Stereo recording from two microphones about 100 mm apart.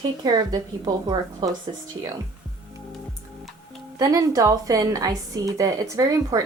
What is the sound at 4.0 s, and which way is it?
A woman's voice, 40° right (ahead or behind).